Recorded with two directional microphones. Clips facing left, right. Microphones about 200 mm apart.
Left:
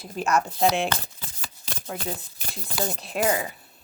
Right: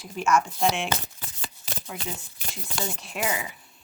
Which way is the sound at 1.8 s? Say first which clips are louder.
Left 5 dB; 45° left (ahead or behind).